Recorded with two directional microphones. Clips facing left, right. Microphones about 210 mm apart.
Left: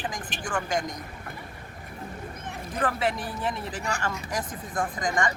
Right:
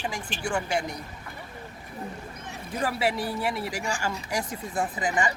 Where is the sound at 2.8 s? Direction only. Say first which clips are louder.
Right 1 dB; 10° right (ahead or behind).